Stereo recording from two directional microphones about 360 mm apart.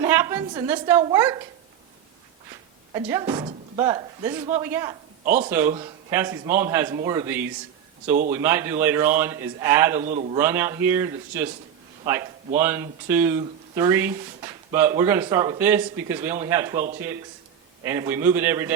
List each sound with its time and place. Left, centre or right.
0.0 s speech: centre
2.9 s speech: centre
10.0 s a man's voice: centre
10.4 s speech: centre
12.5 s speech: centre
17.8 s speech: centre